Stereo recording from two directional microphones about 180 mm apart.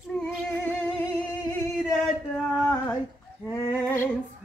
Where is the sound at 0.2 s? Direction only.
5° left (ahead or behind).